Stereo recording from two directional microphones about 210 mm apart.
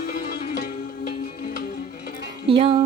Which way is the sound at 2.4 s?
25° right (ahead or behind).